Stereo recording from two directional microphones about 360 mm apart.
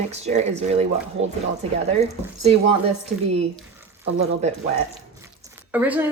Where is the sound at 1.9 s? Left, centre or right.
Centre.